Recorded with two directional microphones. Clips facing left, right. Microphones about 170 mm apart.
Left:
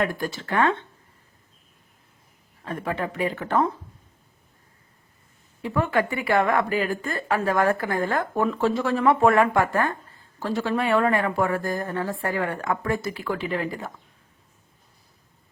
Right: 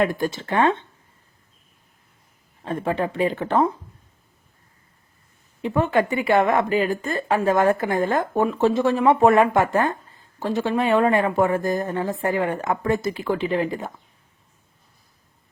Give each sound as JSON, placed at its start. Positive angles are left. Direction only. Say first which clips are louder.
{"t": 0.0, "sound": "a woman's voice", "louder": "right 4 dB", "side_deg": -20}
{"t": 2.6, "sound": "a woman's voice", "louder": "right 4 dB", "side_deg": -25}
{"t": 5.6, "sound": "a woman's voice", "louder": "right 3 dB", "side_deg": -25}